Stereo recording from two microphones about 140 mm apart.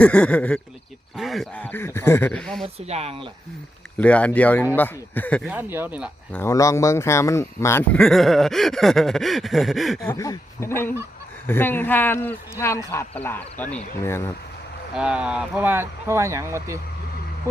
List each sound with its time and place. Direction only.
0.0 s speech: 10° left (ahead or behind)
1.1 s a sound: centre (ahead or behind)
1.5 s speech: 10° left (ahead or behind)
2.4 s a sound: 5° left (ahead or behind)
2.8 s speech: 50° right (ahead or behind)
3.9 s speech: 10° left (ahead or behind)
5.5 s speech: 15° right (ahead or behind)
6.3 s speech: 20° left (ahead or behind)
7.9 s a sound: 5° left (ahead or behind)
10.2 s speech: 20° left (ahead or behind)
14.9 s speech: 5° right (ahead or behind)
17.5 s a sound: 20° right (ahead or behind)